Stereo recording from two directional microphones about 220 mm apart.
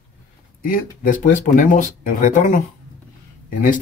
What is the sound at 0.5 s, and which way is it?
Speech, 40° left (ahead or behind).